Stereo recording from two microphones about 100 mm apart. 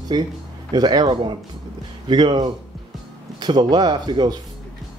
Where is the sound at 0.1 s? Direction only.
40° right (ahead or behind).